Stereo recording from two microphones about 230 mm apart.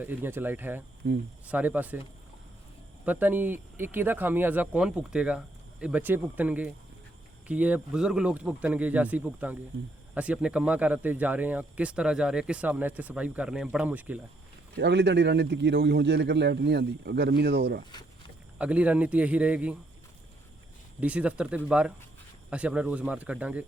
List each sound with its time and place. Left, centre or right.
0.0 s speech: centre
3.1 s speech: centre
14.8 s a man's voice: right
18.6 s speech: centre
21.0 s speech: centre